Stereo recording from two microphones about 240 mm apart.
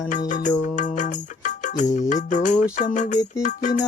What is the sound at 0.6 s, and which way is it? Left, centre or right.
Music, left.